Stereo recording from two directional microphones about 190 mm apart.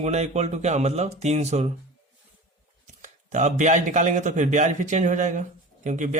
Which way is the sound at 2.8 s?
40° right (ahead or behind).